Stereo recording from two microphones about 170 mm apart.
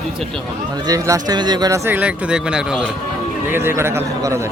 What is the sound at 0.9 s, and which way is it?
Speech, 20° right (ahead or behind).